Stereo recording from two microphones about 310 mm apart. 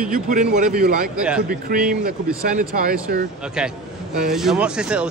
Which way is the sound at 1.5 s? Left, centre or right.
Right.